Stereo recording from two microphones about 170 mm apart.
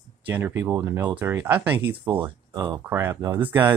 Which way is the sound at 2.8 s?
15° right (ahead or behind).